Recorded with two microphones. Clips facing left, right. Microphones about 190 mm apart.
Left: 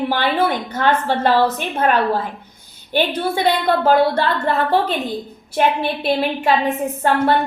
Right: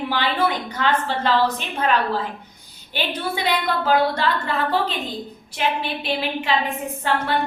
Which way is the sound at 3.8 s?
50° left (ahead or behind).